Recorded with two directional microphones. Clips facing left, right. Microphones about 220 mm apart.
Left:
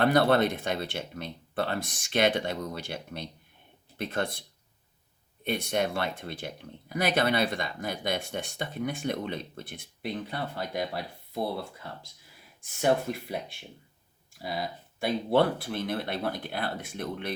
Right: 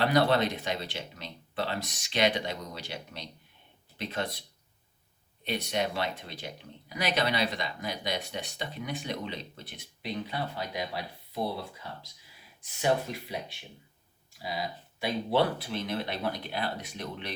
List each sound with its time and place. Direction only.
0.0 s speech: 50° left (ahead or behind)
5.5 s speech: 50° left (ahead or behind)
12.8 s speech: 50° left (ahead or behind)